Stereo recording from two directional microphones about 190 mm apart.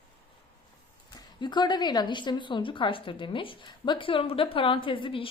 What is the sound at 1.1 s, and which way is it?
A woman's voice, 25° left (ahead or behind).